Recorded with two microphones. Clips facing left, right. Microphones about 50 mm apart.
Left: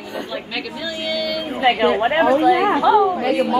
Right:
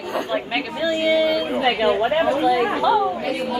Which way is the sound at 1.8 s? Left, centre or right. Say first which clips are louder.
Left 2 dB; left.